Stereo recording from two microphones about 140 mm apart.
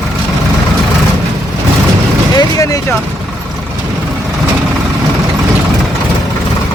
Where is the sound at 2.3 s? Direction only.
25° left (ahead or behind).